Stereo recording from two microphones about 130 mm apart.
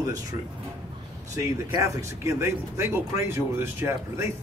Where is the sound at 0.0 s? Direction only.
25° right (ahead or behind).